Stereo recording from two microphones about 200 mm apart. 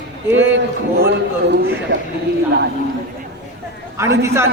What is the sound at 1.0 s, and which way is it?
Speech, 55° right (ahead or behind).